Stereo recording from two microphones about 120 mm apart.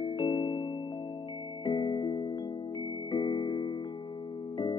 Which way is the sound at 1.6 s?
40° left (ahead or behind).